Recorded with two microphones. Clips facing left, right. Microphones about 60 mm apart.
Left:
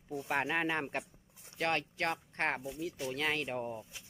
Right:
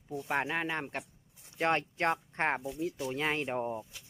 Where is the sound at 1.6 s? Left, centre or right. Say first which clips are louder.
Right 4 dB; right.